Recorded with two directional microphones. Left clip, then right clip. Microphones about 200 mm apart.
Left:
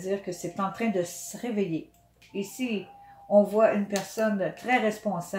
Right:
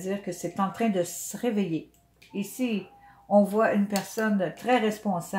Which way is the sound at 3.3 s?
30° right (ahead or behind).